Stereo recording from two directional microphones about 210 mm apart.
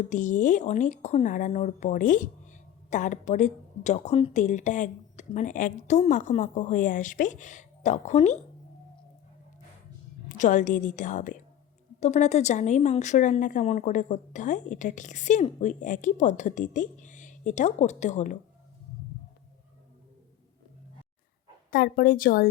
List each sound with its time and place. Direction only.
0.1 s speech: 35° left (ahead or behind)
10.2 s speech: 35° left (ahead or behind)
21.7 s a woman's voice: 45° left (ahead or behind)